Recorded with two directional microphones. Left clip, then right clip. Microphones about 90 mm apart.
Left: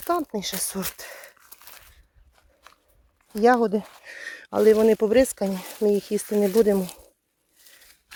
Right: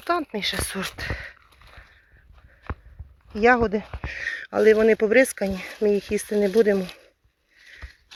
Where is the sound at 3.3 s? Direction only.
80° left.